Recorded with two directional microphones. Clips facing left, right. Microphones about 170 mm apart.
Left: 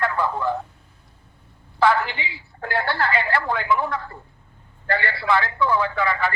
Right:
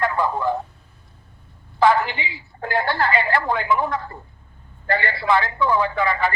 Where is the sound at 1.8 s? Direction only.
20° right (ahead or behind).